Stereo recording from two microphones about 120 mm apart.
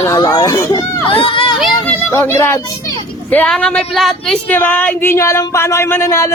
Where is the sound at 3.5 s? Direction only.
10° left (ahead or behind).